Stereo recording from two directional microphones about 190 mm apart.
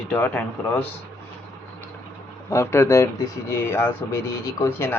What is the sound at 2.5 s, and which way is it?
Speech, 15° left (ahead or behind).